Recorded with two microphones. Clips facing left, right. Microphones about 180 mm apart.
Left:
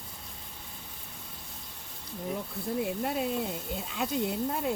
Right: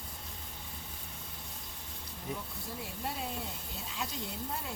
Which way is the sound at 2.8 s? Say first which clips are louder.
Left 7 dB; 60° left (ahead or behind).